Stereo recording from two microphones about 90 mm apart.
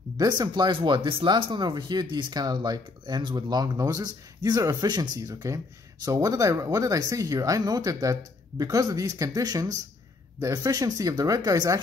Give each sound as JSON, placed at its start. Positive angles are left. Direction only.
{"t": 0.2, "sound": "speech", "side_deg": -45}
{"t": 0.7, "sound": "speech", "side_deg": -65}
{"t": 4.8, "sound": "speech", "side_deg": -50}
{"t": 5.2, "sound": "speech", "side_deg": -35}